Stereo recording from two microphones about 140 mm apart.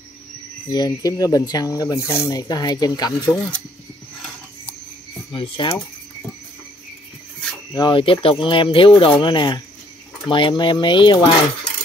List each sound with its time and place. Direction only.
0.7 s speech: 30° left (ahead or behind)
3.3 s speech: 10° left (ahead or behind)
5.3 s speech: 40° left (ahead or behind)
7.7 s speech: 35° left (ahead or behind)